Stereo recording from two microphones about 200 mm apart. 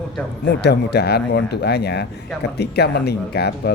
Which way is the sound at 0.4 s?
55° left (ahead or behind).